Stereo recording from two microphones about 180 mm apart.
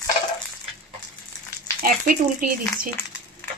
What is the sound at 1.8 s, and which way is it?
Speech, 50° right (ahead or behind).